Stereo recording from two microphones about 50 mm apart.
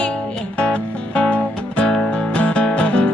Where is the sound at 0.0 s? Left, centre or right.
Left.